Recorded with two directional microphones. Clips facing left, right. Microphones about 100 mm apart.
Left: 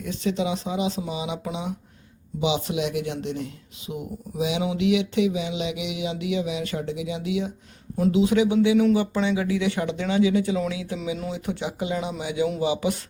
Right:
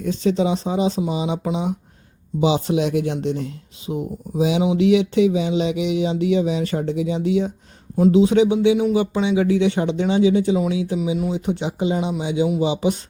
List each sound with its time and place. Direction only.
0.0 s speech: 35° right (ahead or behind); by 9.4 s 15° right (ahead or behind)
9.4 s speech: 30° right (ahead or behind)